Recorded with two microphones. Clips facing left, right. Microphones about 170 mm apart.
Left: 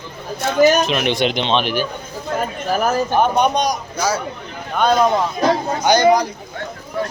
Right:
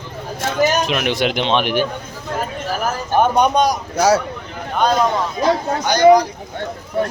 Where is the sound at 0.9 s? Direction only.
5° right (ahead or behind).